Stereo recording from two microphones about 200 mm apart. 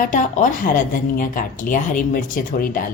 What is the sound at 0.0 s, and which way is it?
A woman's voice, 40° left (ahead or behind).